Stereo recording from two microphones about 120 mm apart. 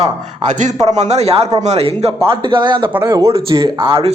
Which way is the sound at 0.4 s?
90° right.